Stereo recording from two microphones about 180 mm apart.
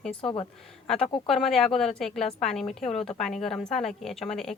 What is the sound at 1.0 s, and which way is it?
Speech, 25° left (ahead or behind).